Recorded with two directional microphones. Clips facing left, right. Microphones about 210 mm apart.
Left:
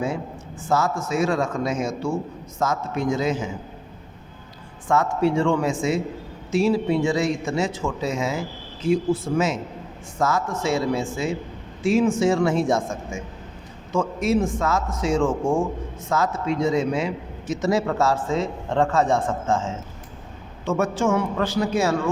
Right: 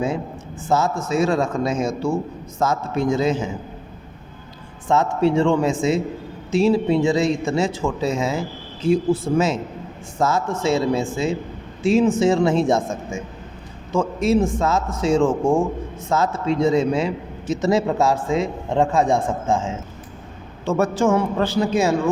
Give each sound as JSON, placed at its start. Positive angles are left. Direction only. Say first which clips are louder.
{"t": 0.7, "sound": "a man's voice", "louder": "right 2 dB", "side_deg": -25}
{"t": 4.9, "sound": "a man's voice", "louder": "right 2 dB", "side_deg": -25}
{"t": 20.7, "sound": "a man's voice", "louder": "right 3 dB", "side_deg": -35}